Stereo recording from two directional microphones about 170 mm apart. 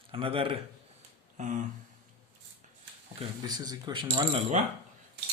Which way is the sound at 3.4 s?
20° right (ahead or behind).